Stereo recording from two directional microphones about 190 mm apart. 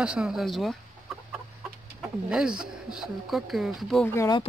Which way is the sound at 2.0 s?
5° right (ahead or behind).